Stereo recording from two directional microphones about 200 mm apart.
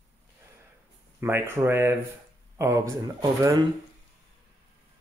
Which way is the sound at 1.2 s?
10° right (ahead or behind).